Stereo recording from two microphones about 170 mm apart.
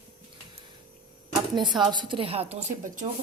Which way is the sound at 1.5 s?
25° right (ahead or behind).